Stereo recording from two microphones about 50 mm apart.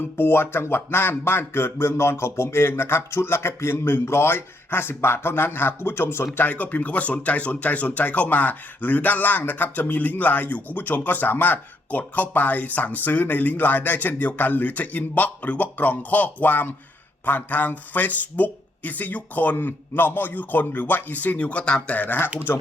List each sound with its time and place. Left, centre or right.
0.2 s speech: left
6.3 s speech: left
21.8 s speech: left